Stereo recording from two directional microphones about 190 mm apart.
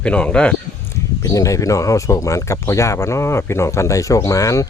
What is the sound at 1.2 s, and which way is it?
Speech, 15° left (ahead or behind).